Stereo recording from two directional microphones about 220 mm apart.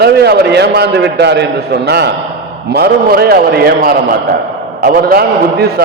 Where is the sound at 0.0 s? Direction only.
45° right (ahead or behind).